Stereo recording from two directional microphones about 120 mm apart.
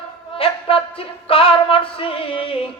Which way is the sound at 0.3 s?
50° left (ahead or behind).